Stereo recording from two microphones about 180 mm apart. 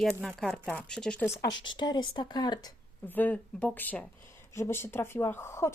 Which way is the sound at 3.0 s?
10° left (ahead or behind).